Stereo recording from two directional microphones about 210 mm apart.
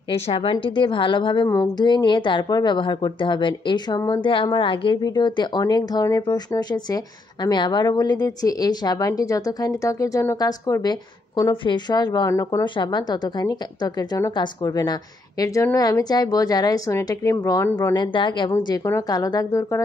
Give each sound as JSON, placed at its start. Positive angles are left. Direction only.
{"t": 0.1, "sound": "a woman's voice", "side_deg": 25}